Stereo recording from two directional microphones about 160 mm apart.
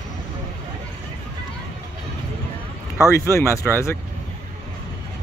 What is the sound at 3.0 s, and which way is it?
Speech, 15° left (ahead or behind).